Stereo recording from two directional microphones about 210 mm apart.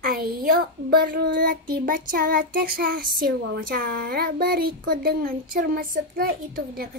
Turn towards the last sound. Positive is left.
turn(degrees=-45)  # may be behind; listen again after turning